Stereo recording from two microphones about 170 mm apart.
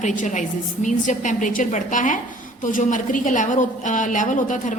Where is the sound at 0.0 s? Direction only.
45° left (ahead or behind).